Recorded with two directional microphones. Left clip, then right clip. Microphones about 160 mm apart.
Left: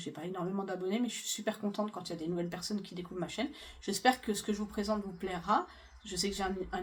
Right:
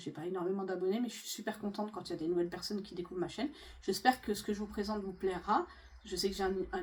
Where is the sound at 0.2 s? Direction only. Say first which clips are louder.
Right 2 dB; 40° left (ahead or behind).